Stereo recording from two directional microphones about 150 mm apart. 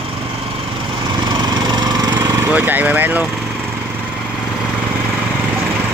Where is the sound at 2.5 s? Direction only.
10° right (ahead or behind).